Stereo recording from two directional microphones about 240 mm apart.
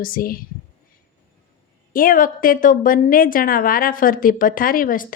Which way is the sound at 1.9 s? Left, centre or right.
Left.